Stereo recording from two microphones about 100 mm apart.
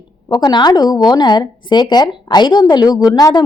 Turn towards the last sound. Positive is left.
turn(degrees=40)  # may be behind; listen again after turning